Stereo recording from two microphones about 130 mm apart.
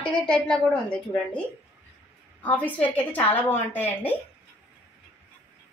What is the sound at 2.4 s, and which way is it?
A woman's voice, 10° left (ahead or behind).